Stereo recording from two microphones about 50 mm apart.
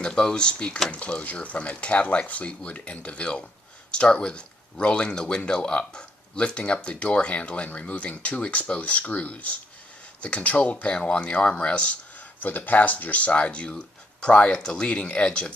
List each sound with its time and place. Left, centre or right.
0.0 s speech: centre
12.4 s speech: left; by 15.5 s centre